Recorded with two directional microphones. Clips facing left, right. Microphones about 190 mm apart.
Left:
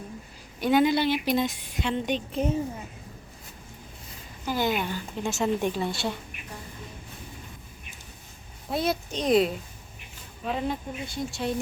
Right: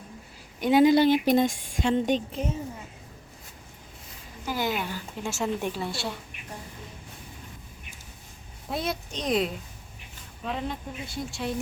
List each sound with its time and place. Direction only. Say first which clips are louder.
0.6 s speech: right 2 dB; 25° right (ahead or behind)
0.9 s speech: right 5 dB; 45° right (ahead or behind)
2.3 s a woman's voice: left 4 dB; 35° left (ahead or behind)
4.4 s speech: left 2 dB; 10° right (ahead or behind)
8.7 s speech: left 4 dB; centre (ahead or behind)
10.5 s speech: left 3 dB; centre (ahead or behind)